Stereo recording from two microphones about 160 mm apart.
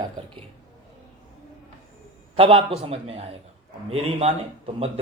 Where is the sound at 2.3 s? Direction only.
35° right (ahead or behind).